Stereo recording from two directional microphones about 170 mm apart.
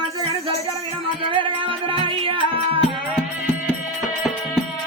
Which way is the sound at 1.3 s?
30° right (ahead or behind).